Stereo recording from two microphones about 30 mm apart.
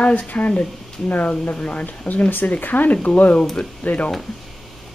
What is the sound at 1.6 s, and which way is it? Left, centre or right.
Speech, left.